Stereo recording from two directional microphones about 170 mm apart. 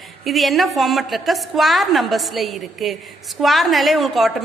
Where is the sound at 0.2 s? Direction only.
Centre (ahead or behind).